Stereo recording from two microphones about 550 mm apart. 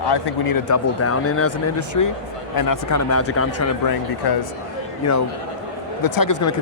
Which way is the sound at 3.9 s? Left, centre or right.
Left.